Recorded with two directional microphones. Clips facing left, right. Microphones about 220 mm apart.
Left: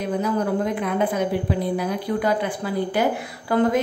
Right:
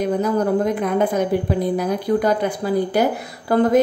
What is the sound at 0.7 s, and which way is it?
A woman's voice, 40° right (ahead or behind).